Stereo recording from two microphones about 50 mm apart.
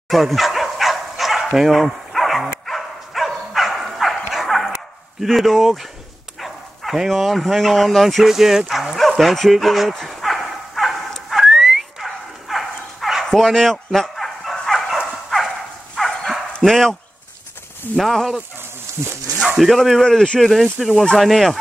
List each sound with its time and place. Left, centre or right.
0.1 s dog: centre
5.2 s speech: centre
9.1 s dog: centre
16.6 s speech: centre
17.9 s speech: centre
19.0 s speech: right
19.3 s dog: centre
19.7 s speech: centre